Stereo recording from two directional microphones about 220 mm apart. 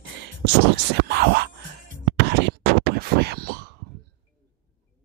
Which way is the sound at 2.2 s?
50° right (ahead or behind).